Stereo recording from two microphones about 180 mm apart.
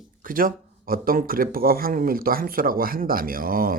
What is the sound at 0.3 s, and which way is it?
Speech, 50° right (ahead or behind).